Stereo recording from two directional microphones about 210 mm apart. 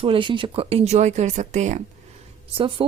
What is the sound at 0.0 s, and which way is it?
Speech, 25° right (ahead or behind).